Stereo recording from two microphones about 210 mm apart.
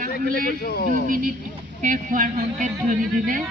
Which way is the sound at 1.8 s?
40° right (ahead or behind).